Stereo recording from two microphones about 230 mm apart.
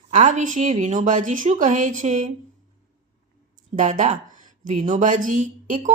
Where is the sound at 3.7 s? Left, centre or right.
Right.